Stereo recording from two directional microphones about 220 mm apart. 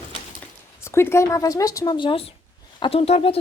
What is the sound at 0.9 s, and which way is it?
A woman's voice, 10° left (ahead or behind).